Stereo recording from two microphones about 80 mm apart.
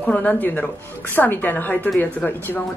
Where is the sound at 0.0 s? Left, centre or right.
Centre.